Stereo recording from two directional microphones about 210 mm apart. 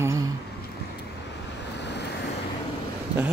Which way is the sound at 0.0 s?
15° right (ahead or behind).